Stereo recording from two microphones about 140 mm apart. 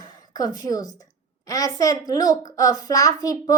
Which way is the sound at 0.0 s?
30° left (ahead or behind).